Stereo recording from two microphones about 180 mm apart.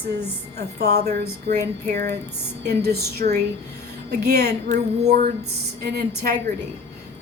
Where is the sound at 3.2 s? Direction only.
50° right (ahead or behind).